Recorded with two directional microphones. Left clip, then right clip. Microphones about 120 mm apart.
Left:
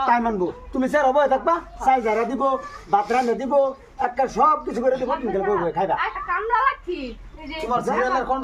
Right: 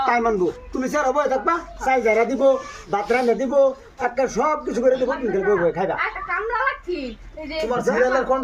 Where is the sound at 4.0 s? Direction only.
5° left (ahead or behind).